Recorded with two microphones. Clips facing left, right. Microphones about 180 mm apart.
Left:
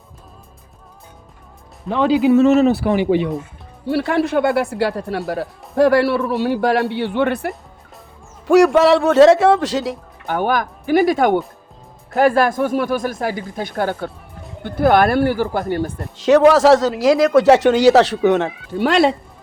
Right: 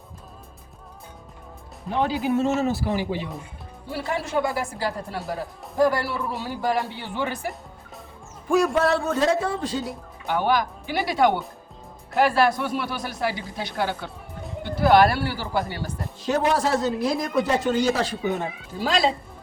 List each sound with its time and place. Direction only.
1.9 s a man's voice: 90° left; by 7.5 s 65° left (ahead or behind)
8.4 s a man's voice: 90° left
10.2 s speech: 50° left (ahead or behind)
16.1 s a man's voice: 90° left; by 19.1 s 65° left (ahead or behind)